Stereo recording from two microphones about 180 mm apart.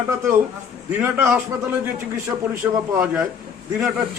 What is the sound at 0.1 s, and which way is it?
A man's voice, 15° right (ahead or behind).